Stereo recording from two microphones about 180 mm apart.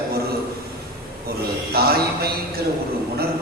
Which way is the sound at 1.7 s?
60° right (ahead or behind).